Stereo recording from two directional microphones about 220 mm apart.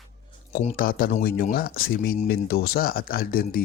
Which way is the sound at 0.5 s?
35° left (ahead or behind).